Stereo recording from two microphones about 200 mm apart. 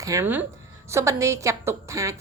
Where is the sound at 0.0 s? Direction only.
15° right (ahead or behind).